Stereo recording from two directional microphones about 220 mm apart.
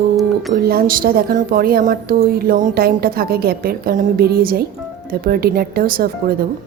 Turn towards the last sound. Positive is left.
turn(degrees=-40)  # may be behind; listen again after turning